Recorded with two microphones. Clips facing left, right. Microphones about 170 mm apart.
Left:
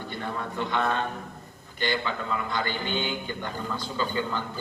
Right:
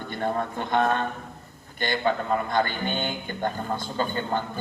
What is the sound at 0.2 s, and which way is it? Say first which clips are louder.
Speech: right 5 dB; 50° right (ahead or behind).